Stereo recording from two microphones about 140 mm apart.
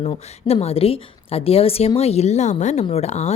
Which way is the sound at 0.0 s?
45° left (ahead or behind).